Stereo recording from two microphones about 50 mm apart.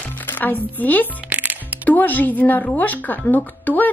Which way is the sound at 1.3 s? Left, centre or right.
Right.